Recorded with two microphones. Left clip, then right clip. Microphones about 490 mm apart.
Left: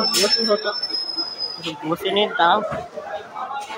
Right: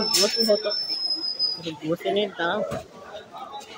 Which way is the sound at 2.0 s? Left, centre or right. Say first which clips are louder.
Left 8 dB; right.